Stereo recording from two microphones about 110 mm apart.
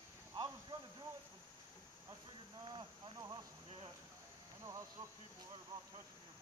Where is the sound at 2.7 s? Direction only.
40° right (ahead or behind).